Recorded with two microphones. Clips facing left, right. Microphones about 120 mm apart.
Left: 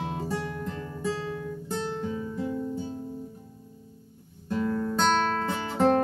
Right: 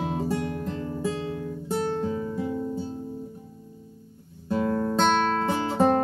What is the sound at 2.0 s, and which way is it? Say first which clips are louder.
Music: right 4 dB; 35° right (ahead or behind).